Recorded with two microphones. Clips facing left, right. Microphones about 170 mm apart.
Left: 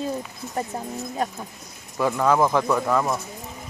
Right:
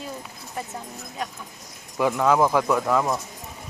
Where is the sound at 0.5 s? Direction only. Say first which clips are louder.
Left 6 dB; 40° left (ahead or behind).